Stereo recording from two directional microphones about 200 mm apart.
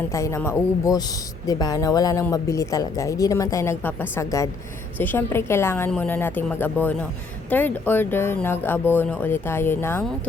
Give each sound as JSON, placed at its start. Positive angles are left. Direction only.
{"t": 0.1, "sound": "speech", "side_deg": 15}